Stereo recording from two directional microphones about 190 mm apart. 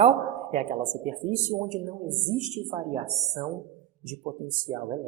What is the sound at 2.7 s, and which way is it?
Speech, 25° right (ahead or behind).